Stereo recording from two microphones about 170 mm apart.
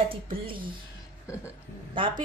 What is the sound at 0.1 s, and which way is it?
Speech, 30° right (ahead or behind).